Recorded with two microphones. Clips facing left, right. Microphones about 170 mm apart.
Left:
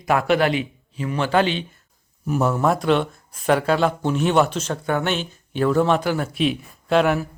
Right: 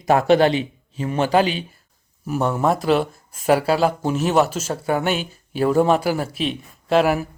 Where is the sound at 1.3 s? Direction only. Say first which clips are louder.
Even; 10° right (ahead or behind).